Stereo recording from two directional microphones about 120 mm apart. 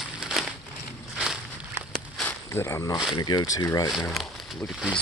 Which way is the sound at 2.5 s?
20° left (ahead or behind).